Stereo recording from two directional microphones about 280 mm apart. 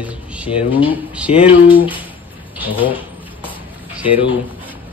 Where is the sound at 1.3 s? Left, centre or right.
Left.